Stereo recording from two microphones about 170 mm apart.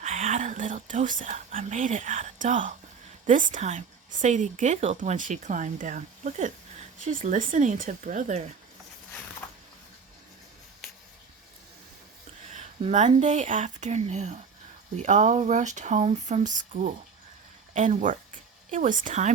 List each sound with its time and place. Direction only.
0.0 s a woman's voice: 45° right (ahead or behind)
12.5 s a woman's voice: 45° right (ahead or behind)